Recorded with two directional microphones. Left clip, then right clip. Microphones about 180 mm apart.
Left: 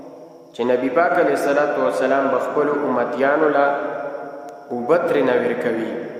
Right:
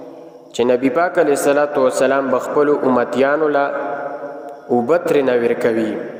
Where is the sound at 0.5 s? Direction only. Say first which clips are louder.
Right 3 dB; 45° right (ahead or behind).